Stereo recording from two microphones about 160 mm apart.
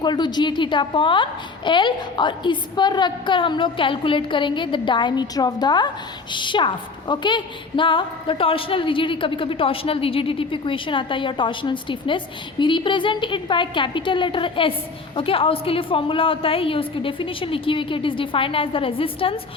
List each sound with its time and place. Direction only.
0.0 s a woman's voice: 25° left (ahead or behind)